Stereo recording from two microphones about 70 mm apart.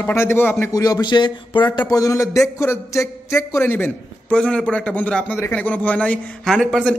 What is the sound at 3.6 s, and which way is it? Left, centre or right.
Speech, left.